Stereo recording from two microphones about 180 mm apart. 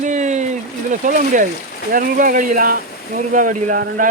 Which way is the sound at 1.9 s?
50° right (ahead or behind).